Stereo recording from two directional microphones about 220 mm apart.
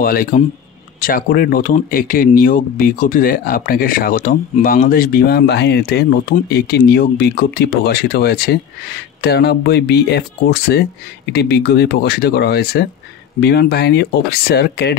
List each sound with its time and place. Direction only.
0.0 s speech: 40° left (ahead or behind)